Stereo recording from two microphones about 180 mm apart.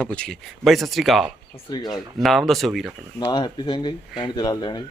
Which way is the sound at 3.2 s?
25° left (ahead or behind).